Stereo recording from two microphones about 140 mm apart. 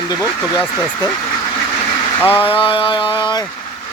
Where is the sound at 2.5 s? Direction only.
40° left (ahead or behind).